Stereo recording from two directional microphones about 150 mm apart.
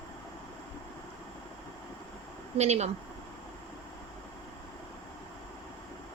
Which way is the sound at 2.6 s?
45° right (ahead or behind).